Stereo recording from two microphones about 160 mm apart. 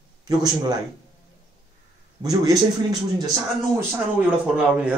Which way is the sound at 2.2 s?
25° right (ahead or behind).